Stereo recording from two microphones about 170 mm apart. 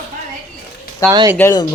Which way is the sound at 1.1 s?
25° right (ahead or behind).